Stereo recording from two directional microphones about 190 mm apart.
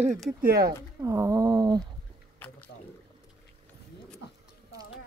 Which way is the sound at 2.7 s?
60° left (ahead or behind).